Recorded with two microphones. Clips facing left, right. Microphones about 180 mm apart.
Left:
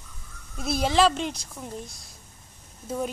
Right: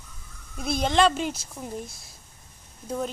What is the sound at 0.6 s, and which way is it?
Speech, 5° left (ahead or behind).